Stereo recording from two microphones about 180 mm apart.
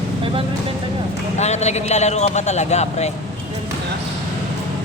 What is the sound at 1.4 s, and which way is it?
Speech, 40° left (ahead or behind).